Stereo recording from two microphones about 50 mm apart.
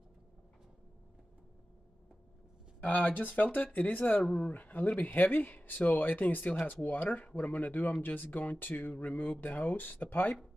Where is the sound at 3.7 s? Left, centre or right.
Left.